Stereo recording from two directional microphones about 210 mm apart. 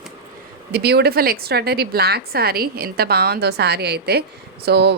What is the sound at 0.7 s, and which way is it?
A woman's voice, 50° right (ahead or behind).